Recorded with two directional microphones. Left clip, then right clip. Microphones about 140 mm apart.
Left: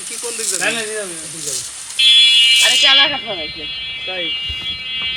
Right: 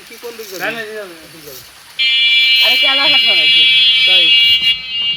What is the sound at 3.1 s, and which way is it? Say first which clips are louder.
Speech: right 12 dB; 15° right (ahead or behind).